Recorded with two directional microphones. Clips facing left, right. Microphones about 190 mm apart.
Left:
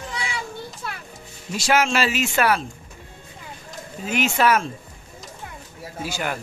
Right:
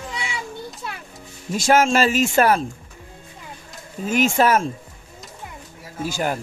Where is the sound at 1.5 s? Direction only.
50° right (ahead or behind).